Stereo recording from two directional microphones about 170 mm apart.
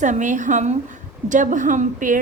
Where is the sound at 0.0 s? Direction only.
45° right (ahead or behind).